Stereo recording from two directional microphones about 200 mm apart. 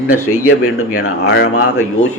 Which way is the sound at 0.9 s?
75° left (ahead or behind).